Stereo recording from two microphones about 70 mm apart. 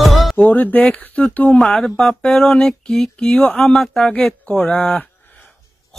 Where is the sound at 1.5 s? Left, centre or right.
Centre.